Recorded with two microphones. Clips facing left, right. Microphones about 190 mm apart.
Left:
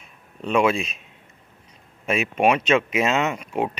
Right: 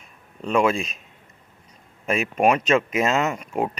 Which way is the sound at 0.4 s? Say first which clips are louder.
Even; centre (ahead or behind).